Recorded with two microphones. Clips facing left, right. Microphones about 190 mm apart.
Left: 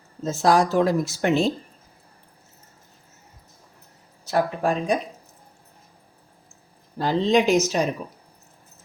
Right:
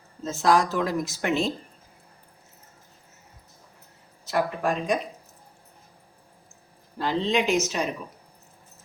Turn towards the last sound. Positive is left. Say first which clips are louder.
# left 5 dB
turn(degrees=35)  # may be behind; listen again after turning